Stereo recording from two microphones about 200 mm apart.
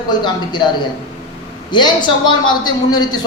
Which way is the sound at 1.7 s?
20° left (ahead or behind).